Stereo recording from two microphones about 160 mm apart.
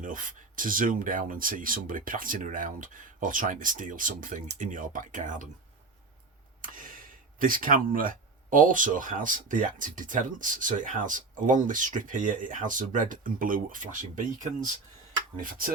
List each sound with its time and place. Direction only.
0.0 s speech: 55° right (ahead or behind)
6.6 s speech: 60° right (ahead or behind)
15.4 s speech: 60° right (ahead or behind)